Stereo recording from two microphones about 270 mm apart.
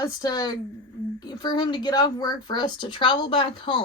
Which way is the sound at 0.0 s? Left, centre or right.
Centre.